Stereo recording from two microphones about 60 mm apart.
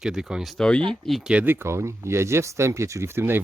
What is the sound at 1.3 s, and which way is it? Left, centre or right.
Speech, centre.